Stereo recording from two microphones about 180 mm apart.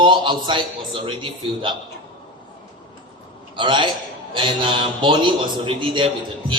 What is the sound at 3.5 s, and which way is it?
A man's voice, 25° right (ahead or behind).